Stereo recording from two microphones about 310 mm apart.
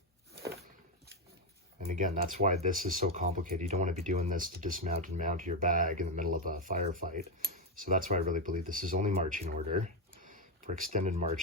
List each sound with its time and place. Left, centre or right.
1.9 s speech: right